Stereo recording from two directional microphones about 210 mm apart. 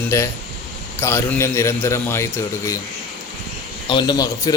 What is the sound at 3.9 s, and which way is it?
Speech, 20° left (ahead or behind).